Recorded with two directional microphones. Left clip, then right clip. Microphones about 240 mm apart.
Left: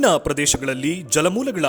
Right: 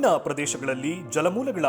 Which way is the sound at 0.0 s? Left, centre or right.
Left.